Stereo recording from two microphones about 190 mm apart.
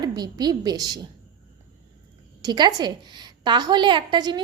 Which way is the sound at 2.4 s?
20° right (ahead or behind).